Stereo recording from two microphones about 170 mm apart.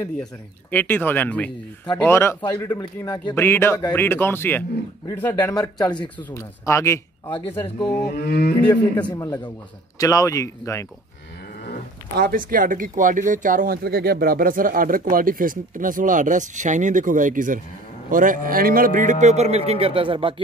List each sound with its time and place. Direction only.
0.2 s a man's voice: 10° left (ahead or behind)
8.0 s wild animals: 70° left (ahead or behind)
9.0 s a man's voice: 20° left (ahead or behind)
12.2 s speech: 55° right (ahead or behind); by 20.3 s 30° right (ahead or behind)